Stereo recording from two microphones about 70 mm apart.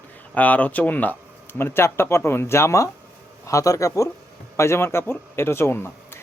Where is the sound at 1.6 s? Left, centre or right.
Left.